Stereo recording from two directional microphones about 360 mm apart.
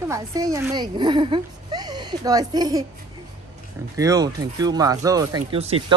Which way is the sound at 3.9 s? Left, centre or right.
Centre.